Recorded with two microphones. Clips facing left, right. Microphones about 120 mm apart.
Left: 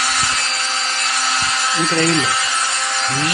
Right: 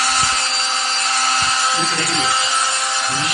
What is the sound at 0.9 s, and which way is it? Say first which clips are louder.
Wood: right 3 dB; 30° right (ahead or behind).